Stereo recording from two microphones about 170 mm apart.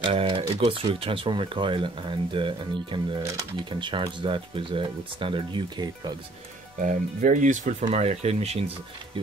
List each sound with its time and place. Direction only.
0.0 s speech: 30° right (ahead or behind)
3.2 s speech: 20° right (ahead or behind)
6.8 s speech: 50° right (ahead or behind)